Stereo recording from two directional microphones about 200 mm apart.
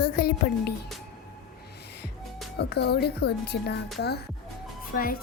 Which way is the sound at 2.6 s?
55° left (ahead or behind).